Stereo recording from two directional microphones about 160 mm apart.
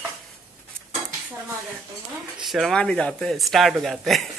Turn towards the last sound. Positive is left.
turn(degrees=0)  # may be behind; listen again after turning